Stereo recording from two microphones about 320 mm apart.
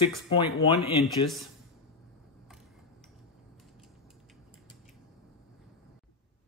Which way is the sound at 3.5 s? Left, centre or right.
Centre.